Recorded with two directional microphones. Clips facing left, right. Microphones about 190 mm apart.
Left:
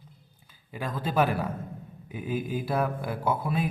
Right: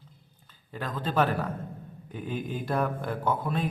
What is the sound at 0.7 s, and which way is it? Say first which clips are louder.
Speech: left 1 dB; 10° left (ahead or behind).